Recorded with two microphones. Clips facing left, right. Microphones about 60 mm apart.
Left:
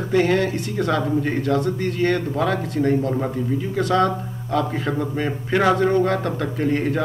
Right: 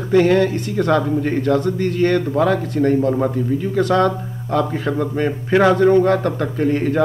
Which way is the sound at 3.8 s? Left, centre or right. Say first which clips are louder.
Right 2 dB; right.